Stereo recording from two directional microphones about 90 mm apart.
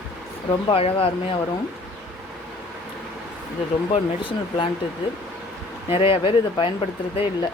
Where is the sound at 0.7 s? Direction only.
90° left.